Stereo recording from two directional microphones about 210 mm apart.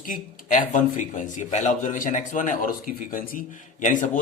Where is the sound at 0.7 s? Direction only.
35° left (ahead or behind).